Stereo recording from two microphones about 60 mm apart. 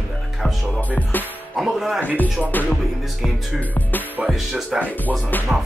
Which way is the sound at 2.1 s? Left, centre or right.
Left.